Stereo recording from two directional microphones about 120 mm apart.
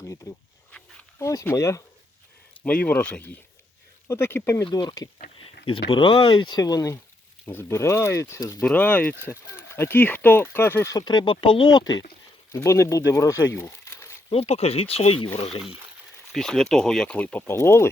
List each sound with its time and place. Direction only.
0.3 s speech: 25° left (ahead or behind)
2.6 s speech: 10° left (ahead or behind)
4.6 s speech: 40° left (ahead or behind)
8.6 s speech: 15° left (ahead or behind)
10.9 s speech: 35° left (ahead or behind)
12.5 s speech: 25° left (ahead or behind)
14.3 s speech: 55° left (ahead or behind)
16.3 s speech: 5° left (ahead or behind); by 17.8 s 20° left (ahead or behind)